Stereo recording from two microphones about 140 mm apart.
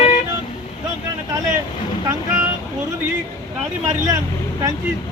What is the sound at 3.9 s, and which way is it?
Speech, 25° right (ahead or behind).